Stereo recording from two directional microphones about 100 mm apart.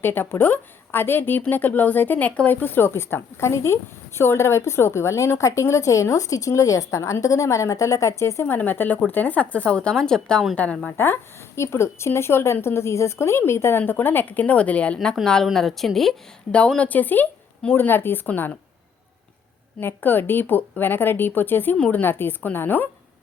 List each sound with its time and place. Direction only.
0.0 s a woman's voice: 20° left (ahead or behind)
19.8 s a woman's voice: 20° left (ahead or behind)